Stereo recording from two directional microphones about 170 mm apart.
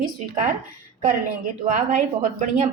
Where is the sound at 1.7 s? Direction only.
50° right (ahead or behind).